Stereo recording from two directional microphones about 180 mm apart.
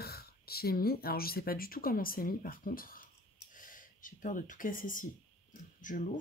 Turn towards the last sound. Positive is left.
turn(degrees=45)  # may be behind; listen again after turning